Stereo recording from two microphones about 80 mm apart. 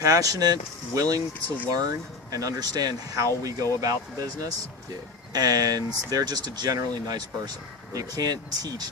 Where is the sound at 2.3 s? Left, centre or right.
Right.